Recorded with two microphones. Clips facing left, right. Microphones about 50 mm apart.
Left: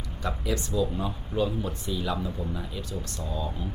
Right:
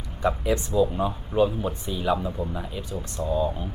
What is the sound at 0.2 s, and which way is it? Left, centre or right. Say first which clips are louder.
Speech: right 7 dB; right.